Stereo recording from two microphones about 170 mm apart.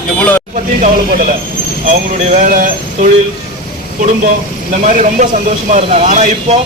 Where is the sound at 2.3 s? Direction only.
55° right (ahead or behind).